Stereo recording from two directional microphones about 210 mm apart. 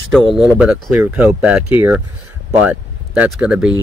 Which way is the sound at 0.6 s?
5° right (ahead or behind).